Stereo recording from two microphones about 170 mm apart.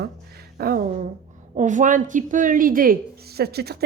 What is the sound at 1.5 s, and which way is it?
A woman's voice, 45° right (ahead or behind).